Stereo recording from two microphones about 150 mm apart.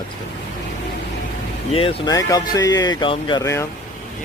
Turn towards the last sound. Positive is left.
turn(degrees=20)  # may be behind; listen again after turning